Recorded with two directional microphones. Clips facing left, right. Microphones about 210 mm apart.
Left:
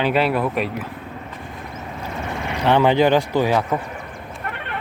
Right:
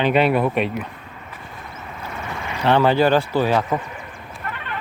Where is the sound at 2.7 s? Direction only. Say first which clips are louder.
Left 1 dB; 15° left (ahead or behind).